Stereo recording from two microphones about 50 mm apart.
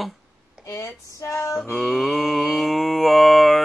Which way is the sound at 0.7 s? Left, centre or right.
Left.